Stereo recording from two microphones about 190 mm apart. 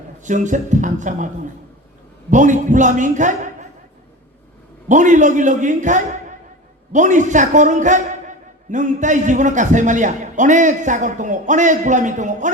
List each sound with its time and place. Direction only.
0.2 s a man's voice: 40° right (ahead or behind)
2.3 s a man's voice: 40° right (ahead or behind)
4.9 s a man's voice: 40° right (ahead or behind)